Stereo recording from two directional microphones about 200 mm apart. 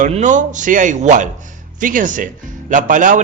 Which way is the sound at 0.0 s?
40° right (ahead or behind).